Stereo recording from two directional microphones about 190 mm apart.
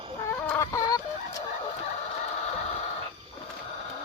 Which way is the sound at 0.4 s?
10° left (ahead or behind).